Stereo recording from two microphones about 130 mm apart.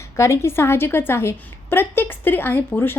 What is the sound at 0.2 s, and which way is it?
A woman's voice, 20° left (ahead or behind).